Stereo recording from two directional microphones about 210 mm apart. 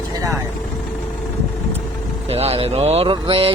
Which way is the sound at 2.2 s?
30° right (ahead or behind).